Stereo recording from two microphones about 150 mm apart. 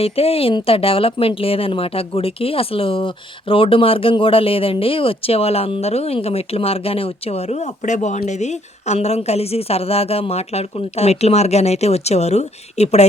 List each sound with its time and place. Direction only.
0.0 s a woman's voice: 40° left (ahead or behind)